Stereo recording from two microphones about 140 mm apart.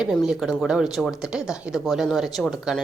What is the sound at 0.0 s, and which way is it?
A woman's voice, 5° right (ahead or behind).